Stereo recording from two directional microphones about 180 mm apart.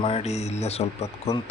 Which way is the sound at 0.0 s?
30° left (ahead or behind).